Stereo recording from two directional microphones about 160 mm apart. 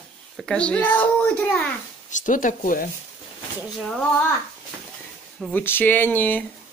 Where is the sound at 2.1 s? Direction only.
55° left (ahead or behind).